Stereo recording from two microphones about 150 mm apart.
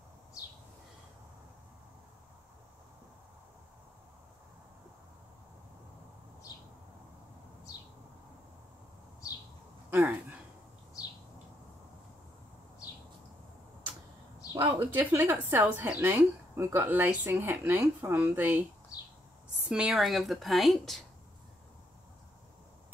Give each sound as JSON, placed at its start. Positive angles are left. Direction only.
{"t": 6.5, "sound": "bird", "side_deg": 25}
{"t": 9.8, "sound": "a sound", "side_deg": -10}
{"t": 14.5, "sound": "speech", "side_deg": -20}
{"t": 19.7, "sound": "a woman's voice", "side_deg": -5}